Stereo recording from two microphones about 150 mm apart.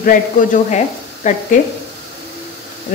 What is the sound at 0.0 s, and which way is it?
Speech, 65° left (ahead or behind).